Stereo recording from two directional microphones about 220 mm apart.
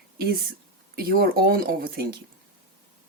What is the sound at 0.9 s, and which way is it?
Speech, 40° right (ahead or behind).